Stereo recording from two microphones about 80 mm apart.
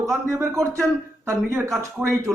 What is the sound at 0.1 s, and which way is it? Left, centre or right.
A man's voice, right.